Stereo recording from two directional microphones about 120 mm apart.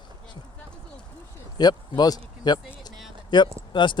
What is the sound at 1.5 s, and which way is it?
Speech, 35° left (ahead or behind).